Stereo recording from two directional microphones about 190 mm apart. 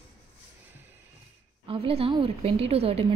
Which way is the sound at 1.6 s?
30° right (ahead or behind).